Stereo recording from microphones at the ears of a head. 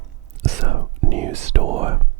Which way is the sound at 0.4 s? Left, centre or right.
Right.